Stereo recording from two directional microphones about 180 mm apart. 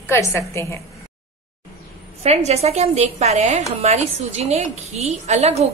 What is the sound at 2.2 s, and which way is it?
A woman's voice, 35° right (ahead or behind).